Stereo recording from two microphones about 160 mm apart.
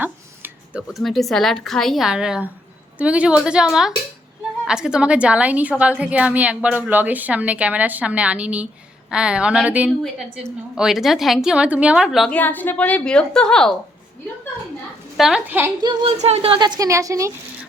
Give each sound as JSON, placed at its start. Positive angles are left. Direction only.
{"t": 0.0, "sound": "a sound", "side_deg": -10}
{"t": 0.9, "sound": "a woman's voice", "side_deg": 0}
{"t": 12.4, "sound": "a woman's voice", "side_deg": 10}
{"t": 15.2, "sound": "a woman's voice", "side_deg": -5}
{"t": 15.8, "sound": "a woman's voice", "side_deg": -30}
{"t": 16.1, "sound": "a woman's voice", "side_deg": -40}